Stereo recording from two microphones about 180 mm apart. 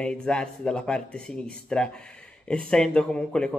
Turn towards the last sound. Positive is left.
turn(degrees=5)  # may be behind; listen again after turning